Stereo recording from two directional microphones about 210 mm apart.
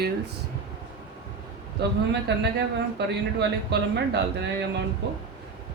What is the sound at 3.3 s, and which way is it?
Speech, 55° right (ahead or behind).